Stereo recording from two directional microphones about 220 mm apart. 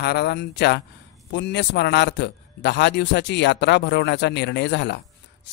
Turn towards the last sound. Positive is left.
turn(degrees=50)  # may be behind; listen again after turning